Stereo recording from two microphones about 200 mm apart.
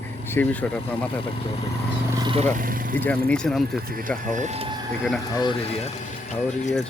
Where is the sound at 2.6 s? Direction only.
45° right (ahead or behind).